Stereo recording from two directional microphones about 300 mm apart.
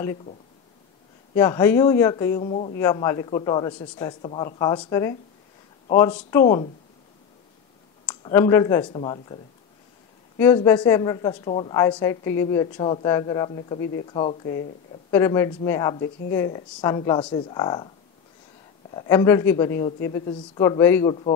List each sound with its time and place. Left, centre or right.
1.3 s a woman's voice: centre
8.2 s a woman's voice: centre
10.4 s a woman's voice: centre
18.9 s a woman's voice: centre